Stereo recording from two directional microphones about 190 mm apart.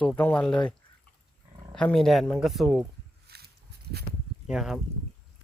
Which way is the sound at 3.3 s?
55° right (ahead or behind).